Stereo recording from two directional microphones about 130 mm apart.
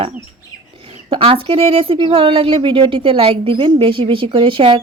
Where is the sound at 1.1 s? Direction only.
45° right (ahead or behind).